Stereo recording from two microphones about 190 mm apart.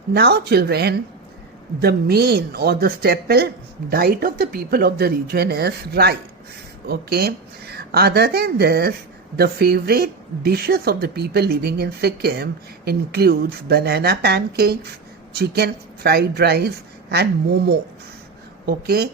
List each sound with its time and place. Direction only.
0.1 s a woman's voice: 55° right (ahead or behind)
18.6 s a woman's voice: 55° right (ahead or behind)